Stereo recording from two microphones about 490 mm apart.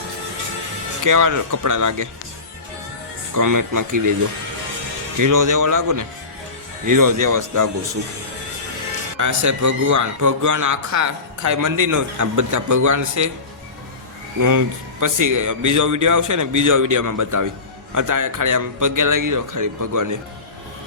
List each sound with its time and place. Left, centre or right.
1.0 s a man's voice: right
3.3 s a man's voice: right
5.1 s a man's voice: right
9.1 s a man's voice: right
15.0 s a man's voice: right